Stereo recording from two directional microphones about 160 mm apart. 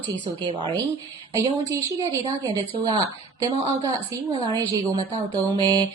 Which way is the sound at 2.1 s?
20° right (ahead or behind).